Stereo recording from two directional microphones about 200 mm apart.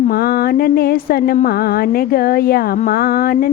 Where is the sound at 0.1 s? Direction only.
50° left (ahead or behind).